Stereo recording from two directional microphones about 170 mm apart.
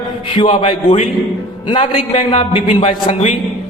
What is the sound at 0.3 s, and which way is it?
A man's voice, 35° left (ahead or behind).